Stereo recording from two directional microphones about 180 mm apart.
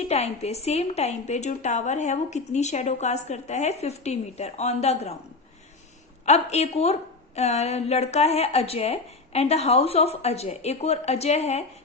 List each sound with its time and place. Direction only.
0.0 s a woman's voice: 35° left (ahead or behind)
6.2 s a woman's voice: 35° left (ahead or behind)